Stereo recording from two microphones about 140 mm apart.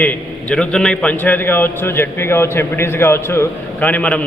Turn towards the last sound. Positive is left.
turn(degrees=10)  # may be behind; listen again after turning